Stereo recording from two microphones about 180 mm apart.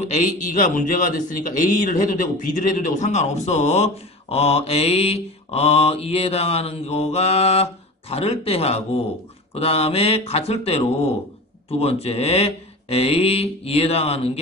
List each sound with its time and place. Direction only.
0.0 s speech: 45° left (ahead or behind)
11.8 s speech: 35° left (ahead or behind)